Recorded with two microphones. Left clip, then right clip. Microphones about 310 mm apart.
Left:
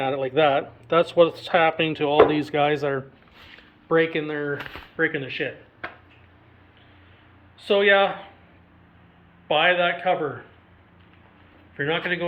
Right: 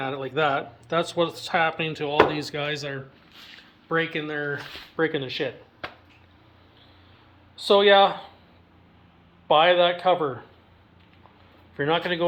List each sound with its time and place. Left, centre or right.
0.0 s speech: centre
4.4 s speech: centre
7.6 s speech: centre
9.5 s speech: centre
11.8 s speech: centre